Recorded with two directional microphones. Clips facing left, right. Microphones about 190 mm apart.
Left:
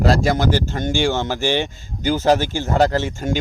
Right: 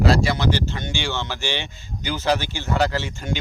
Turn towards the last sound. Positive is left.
turn(degrees=45)  # may be behind; listen again after turning